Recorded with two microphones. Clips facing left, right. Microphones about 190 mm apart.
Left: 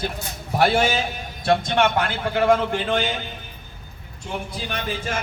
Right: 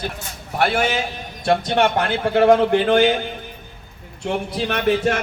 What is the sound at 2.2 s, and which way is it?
A man's voice, 55° right (ahead or behind).